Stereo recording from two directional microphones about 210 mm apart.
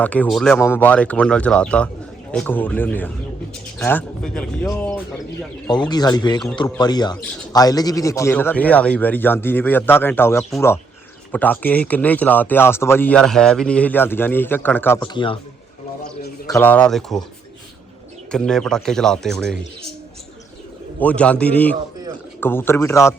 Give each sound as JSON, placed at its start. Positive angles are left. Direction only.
{"t": 0.0, "sound": "speech", "side_deg": 5}
{"t": 5.9, "sound": "speech", "side_deg": 20}
{"t": 16.5, "sound": "speech", "side_deg": 10}
{"t": 18.3, "sound": "speech", "side_deg": 5}
{"t": 21.0, "sound": "speech", "side_deg": 5}